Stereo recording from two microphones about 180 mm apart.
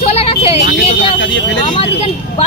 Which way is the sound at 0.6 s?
85° left.